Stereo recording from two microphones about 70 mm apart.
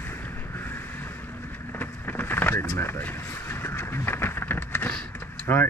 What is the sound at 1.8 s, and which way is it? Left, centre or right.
Vehicle, left.